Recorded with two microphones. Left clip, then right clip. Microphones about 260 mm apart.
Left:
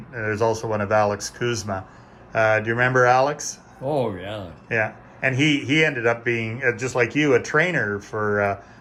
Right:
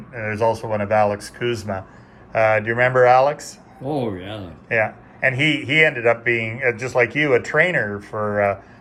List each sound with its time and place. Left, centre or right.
0.1 s speech: centre
3.8 s a man's voice: centre